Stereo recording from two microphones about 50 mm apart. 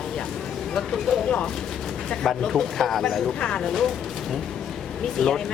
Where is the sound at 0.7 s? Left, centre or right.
Centre.